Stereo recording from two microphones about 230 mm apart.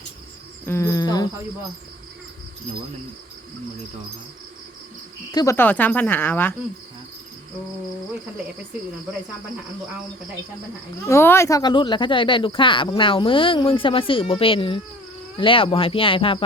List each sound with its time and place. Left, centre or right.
0.6 s cricket: centre
5.3 s speech: centre
11.1 s speech: centre